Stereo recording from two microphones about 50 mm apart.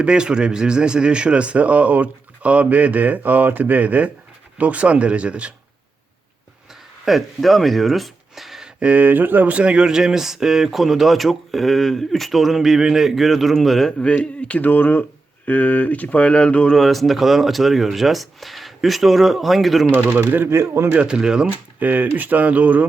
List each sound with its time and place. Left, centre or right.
0.0 s speech: centre
7.0 s speech: centre
8.8 s speech: right; by 13.9 s centre
14.0 s speech: left
16.7 s speech: centre
20.1 s speech: right
20.5 s speech: right
21.0 s speech: centre
21.4 s speech: right